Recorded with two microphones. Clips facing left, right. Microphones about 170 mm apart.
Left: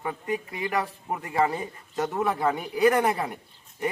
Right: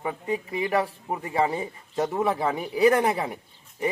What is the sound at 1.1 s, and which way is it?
Speech, 15° right (ahead or behind).